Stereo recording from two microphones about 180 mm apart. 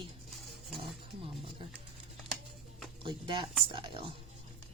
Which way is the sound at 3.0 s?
25° right (ahead or behind).